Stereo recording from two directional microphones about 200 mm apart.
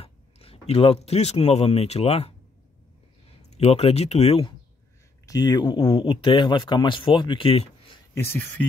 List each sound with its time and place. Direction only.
0.0 s speech: 30° left (ahead or behind)
3.4 s speech: 30° left (ahead or behind)
5.2 s speech: 20° left (ahead or behind)
8.1 s speech: 10° left (ahead or behind)